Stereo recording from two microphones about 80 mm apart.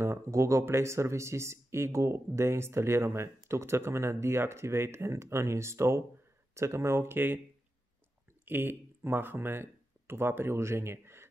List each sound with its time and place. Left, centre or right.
0.0 s speech: right
8.5 s speech: right